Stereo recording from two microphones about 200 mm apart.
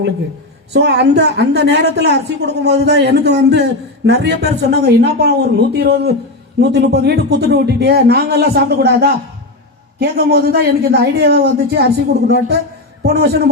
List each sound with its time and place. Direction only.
0.7 s a woman's voice: 55° right (ahead or behind)
13.0 s a man's voice: 55° right (ahead or behind)